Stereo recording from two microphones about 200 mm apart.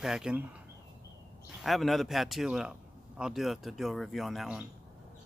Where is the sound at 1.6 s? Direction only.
Centre (ahead or behind).